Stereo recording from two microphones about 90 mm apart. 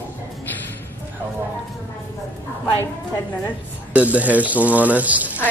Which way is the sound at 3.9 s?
15° right (ahead or behind).